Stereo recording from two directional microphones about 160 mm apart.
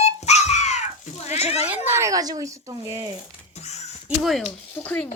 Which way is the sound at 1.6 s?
10° right (ahead or behind).